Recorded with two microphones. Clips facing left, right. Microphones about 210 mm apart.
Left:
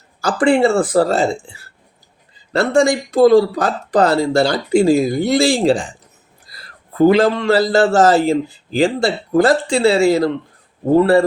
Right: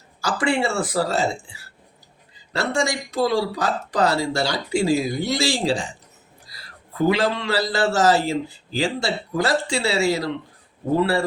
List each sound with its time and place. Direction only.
0.2 s speech: 55° left (ahead or behind)
7.1 s speech: 50° left (ahead or behind)